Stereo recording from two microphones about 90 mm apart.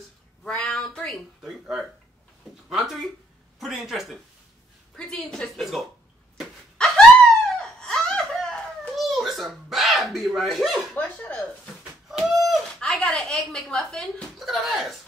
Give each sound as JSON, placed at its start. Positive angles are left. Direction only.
{"t": 0.4, "sound": "a woman's voice", "side_deg": 5}
{"t": 4.9, "sound": "a woman's voice", "side_deg": 10}
{"t": 6.3, "sound": "wail", "side_deg": 0}
{"t": 7.4, "sound": "giggle", "side_deg": 5}
{"t": 11.0, "sound": "speech", "side_deg": 15}
{"t": 12.1, "sound": "speech", "side_deg": -5}